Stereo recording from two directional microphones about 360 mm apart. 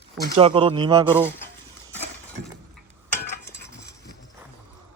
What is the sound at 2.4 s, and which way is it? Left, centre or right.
Breaking, right.